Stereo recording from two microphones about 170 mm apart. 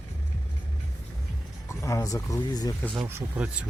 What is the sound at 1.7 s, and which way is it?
Speech, 15° left (ahead or behind).